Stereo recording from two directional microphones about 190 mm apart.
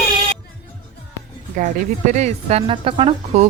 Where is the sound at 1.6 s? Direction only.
40° right (ahead or behind).